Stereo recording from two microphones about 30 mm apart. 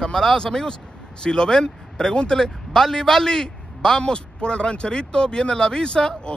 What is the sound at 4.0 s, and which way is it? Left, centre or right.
Speech, left.